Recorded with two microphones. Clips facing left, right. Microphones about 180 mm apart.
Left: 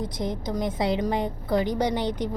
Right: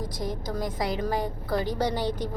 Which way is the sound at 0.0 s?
20° left (ahead or behind).